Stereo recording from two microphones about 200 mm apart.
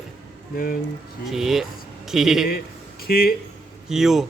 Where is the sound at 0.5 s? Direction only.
45° left (ahead or behind).